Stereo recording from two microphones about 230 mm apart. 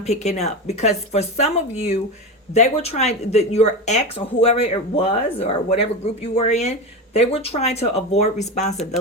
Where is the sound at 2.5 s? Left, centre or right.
Left.